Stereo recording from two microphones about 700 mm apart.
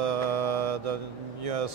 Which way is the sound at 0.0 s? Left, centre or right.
Right.